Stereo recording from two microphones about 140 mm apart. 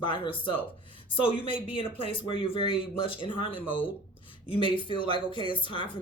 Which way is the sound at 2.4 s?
40° left (ahead or behind).